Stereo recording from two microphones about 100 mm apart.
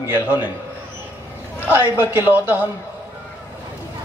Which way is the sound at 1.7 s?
15° right (ahead or behind).